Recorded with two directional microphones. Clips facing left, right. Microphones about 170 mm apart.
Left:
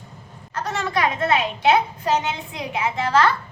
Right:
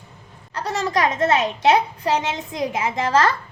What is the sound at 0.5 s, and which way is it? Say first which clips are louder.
A woman's voice: right 2 dB; 35° right (ahead or behind).